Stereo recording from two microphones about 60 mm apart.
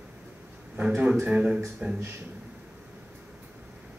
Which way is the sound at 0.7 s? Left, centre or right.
Right.